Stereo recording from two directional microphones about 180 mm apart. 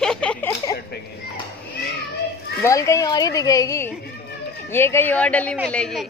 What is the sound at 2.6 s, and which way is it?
A woman's voice, 15° left (ahead or behind).